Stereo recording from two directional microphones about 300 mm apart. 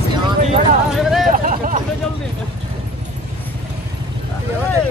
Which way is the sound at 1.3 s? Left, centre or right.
Right.